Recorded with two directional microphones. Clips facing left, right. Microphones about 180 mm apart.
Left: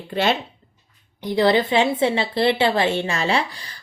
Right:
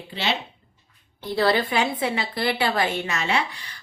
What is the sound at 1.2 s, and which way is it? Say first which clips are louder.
A woman's voice: left 4 dB; 20° left (ahead or behind).